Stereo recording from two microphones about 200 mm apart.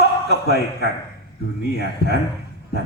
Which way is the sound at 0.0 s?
55° left (ahead or behind).